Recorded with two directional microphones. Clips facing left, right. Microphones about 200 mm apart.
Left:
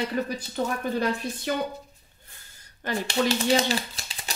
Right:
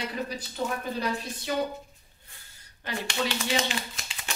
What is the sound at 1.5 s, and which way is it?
Speech, 55° left (ahead or behind).